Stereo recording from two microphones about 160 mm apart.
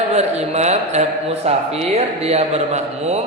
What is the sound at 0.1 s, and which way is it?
Speech, 45° right (ahead or behind).